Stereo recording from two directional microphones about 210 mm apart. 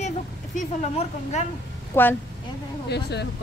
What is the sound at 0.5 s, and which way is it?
Speech, 35° left (ahead or behind).